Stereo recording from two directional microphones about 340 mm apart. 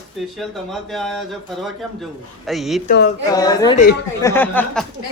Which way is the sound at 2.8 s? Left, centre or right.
Left.